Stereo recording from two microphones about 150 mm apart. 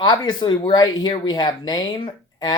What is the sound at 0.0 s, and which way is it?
Speech, 30° left (ahead or behind).